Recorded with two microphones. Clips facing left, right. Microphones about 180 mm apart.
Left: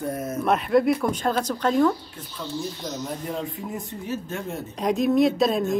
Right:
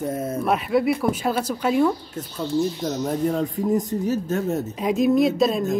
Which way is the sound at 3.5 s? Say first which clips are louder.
Right 11 dB; 40° right (ahead or behind).